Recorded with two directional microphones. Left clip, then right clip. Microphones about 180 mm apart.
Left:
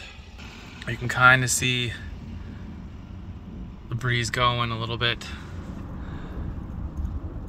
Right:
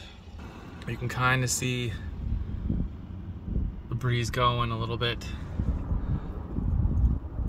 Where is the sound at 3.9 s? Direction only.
15° right (ahead or behind).